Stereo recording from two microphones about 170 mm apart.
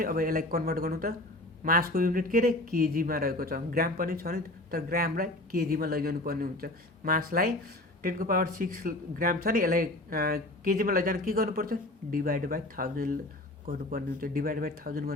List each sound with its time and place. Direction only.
0.0 s speech: 60° right (ahead or behind)